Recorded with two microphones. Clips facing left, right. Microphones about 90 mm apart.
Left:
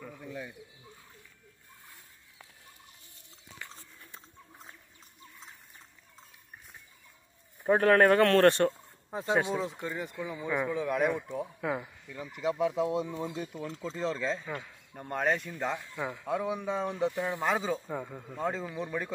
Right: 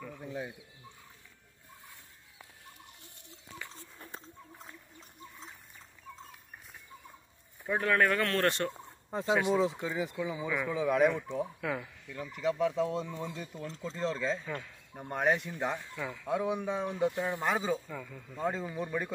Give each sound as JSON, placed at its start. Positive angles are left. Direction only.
{"t": 0.2, "sound": "speech", "side_deg": -25}
{"t": 7.6, "sound": "speech", "side_deg": 45}
{"t": 8.2, "sound": "speech", "side_deg": 30}
{"t": 9.1, "sound": "speech", "side_deg": 0}
{"t": 11.6, "sound": "speech", "side_deg": 20}
{"t": 12.1, "sound": "speech", "side_deg": 5}
{"t": 16.0, "sound": "speech", "side_deg": 20}
{"t": 16.3, "sound": "speech", "side_deg": -5}
{"t": 17.8, "sound": "speech", "side_deg": 30}
{"t": 18.3, "sound": "speech", "side_deg": 0}